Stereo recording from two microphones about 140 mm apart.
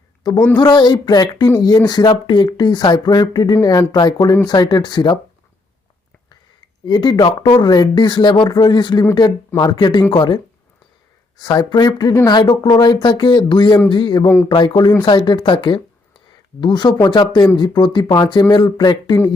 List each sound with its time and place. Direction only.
0.5 s speech: 30° left (ahead or behind)
6.8 s speech: 30° left (ahead or behind)